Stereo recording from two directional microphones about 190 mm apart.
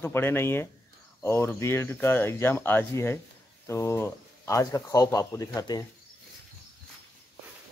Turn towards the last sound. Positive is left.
turn(degrees=20)  # may be behind; listen again after turning